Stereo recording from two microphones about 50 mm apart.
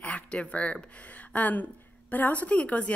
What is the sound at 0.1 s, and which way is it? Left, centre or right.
A woman's voice, left.